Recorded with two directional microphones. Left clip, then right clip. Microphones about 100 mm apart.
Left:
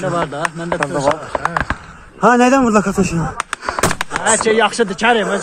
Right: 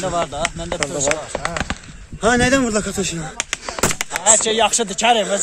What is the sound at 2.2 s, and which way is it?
Speech, 15° left (ahead or behind).